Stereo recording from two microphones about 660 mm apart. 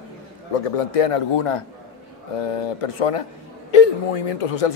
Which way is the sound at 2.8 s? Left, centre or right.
Left.